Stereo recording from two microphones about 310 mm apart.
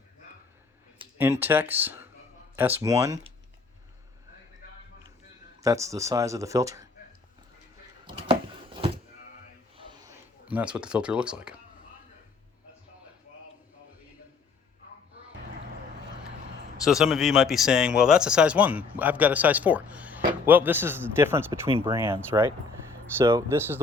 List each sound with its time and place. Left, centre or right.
0.9 s speech: centre
5.6 s speech: centre
8.0 s a sound: centre
16.8 s speech: centre